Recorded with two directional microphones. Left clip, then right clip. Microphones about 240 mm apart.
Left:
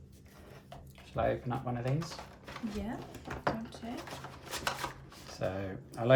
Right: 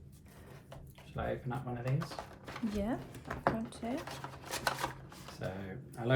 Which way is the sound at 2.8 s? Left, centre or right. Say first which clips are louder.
Right 3 dB; centre.